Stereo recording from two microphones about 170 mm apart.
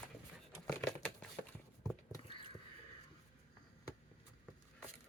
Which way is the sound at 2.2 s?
30° left (ahead or behind).